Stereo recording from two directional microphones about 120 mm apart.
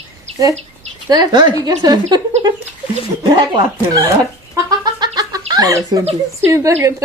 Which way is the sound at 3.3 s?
40° right (ahead or behind).